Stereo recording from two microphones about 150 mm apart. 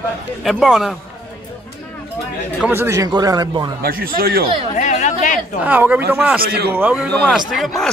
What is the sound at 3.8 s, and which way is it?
Speech, 75° right (ahead or behind).